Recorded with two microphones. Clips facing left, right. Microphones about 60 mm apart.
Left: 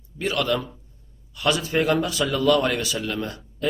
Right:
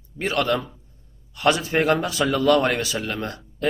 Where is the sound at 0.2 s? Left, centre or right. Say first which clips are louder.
Right 1 dB; right.